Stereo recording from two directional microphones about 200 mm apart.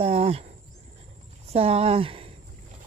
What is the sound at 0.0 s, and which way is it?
Insect, 30° right (ahead or behind).